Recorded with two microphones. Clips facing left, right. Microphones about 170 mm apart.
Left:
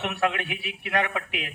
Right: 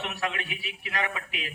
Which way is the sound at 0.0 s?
60° left (ahead or behind).